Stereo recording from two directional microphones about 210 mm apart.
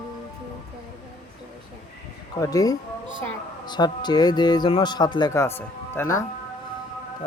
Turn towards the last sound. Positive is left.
turn(degrees=15)  # may be behind; listen again after turning